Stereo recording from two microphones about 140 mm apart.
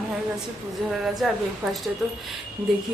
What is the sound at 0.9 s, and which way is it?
Speech, centre (ahead or behind).